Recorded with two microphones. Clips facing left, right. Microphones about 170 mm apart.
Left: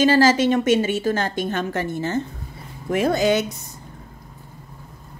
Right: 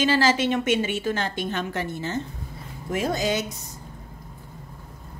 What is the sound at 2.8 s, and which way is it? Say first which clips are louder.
Speech: left 6 dB; 65° left (ahead or behind).